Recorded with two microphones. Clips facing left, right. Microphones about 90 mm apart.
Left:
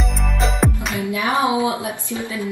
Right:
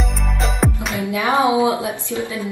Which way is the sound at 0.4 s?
Centre (ahead or behind).